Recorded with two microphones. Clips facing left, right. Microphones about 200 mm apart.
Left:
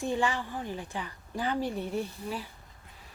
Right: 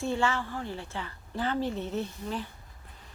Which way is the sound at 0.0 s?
15° left (ahead or behind).